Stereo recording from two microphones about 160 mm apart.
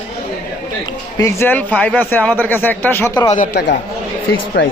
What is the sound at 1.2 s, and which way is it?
Speech, 15° left (ahead or behind).